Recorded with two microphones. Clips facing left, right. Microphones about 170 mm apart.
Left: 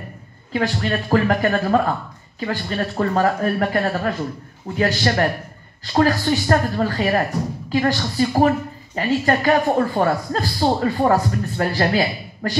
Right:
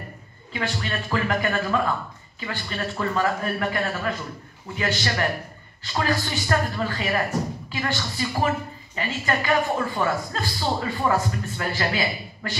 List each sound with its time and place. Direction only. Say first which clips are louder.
0.5 s a woman's voice: left 7 dB; 45° left (ahead or behind)